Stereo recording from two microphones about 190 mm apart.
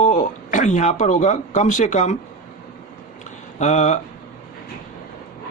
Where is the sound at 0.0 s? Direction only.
40° left (ahead or behind).